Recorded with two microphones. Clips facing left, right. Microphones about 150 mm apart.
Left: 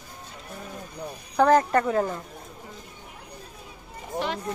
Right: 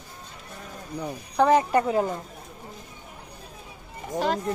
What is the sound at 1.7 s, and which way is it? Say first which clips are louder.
Speech: right 1 dB; 15° right (ahead or behind).